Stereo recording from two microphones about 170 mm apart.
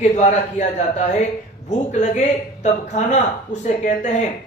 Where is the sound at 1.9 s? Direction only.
45° left (ahead or behind).